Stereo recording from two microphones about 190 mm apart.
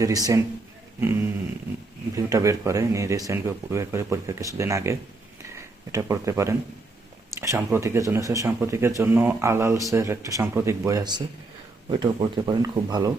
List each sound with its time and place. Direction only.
0.0 s speech: 20° right (ahead or behind)
2.1 s speech: 15° right (ahead or behind)